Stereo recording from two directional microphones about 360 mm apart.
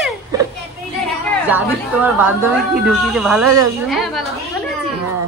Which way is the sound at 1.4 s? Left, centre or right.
Centre.